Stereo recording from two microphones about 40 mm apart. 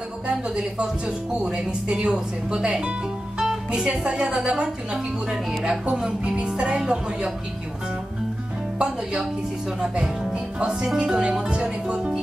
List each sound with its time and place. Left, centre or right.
0.6 s speech: right
5.6 s speech: centre
8.7 s speech: right
10.3 s music: right
11.0 s speech: right